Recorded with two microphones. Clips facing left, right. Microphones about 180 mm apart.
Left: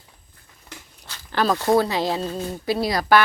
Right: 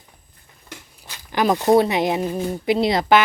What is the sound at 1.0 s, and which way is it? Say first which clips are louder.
Speech: right 2 dB; 15° right (ahead or behind).